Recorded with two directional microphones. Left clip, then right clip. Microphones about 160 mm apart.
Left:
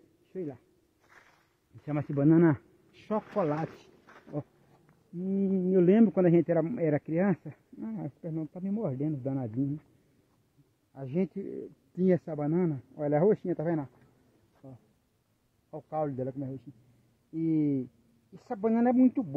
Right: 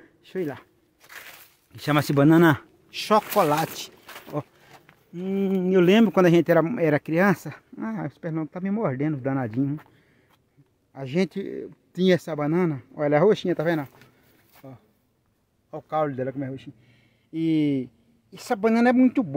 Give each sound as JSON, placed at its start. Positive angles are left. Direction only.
{"t": 0.3, "sound": "speech", "side_deg": -35}
{"t": 1.0, "sound": "walk", "side_deg": -10}
{"t": 1.9, "sound": "speech", "side_deg": -40}
{"t": 2.9, "sound": "speech", "side_deg": -15}
{"t": 10.9, "sound": "a man's voice", "side_deg": -30}
{"t": 11.9, "sound": "speech", "side_deg": -5}
{"t": 12.4, "sound": "speech", "side_deg": -15}
{"t": 13.4, "sound": "speech", "side_deg": 0}
{"t": 15.7, "sound": "speech", "side_deg": -15}